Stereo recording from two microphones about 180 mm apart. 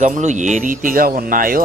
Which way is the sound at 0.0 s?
40° right (ahead or behind).